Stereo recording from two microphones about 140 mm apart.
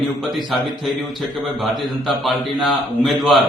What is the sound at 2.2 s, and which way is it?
A man's voice, centre (ahead or behind).